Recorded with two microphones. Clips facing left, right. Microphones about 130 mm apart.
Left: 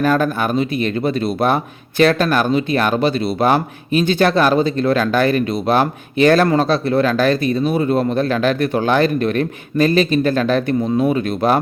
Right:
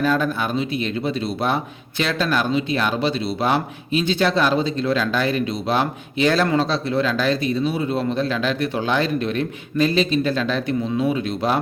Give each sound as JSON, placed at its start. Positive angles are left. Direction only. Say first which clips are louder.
{"t": 0.0, "sound": "speech", "louder": "left 4 dB", "side_deg": 50}